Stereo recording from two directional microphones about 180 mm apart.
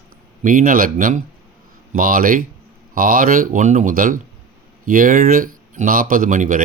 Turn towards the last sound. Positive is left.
turn(degrees=-45)  # may be behind; listen again after turning